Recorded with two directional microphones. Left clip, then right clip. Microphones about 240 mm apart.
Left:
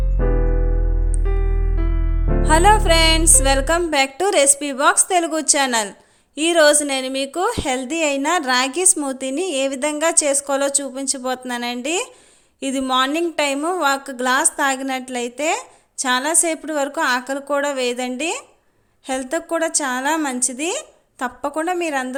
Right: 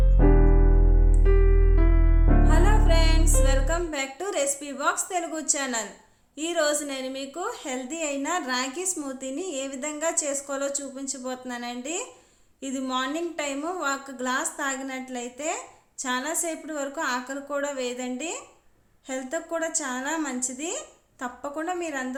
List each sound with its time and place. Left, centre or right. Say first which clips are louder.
2.4 s a woman's voice: left 14 dB; left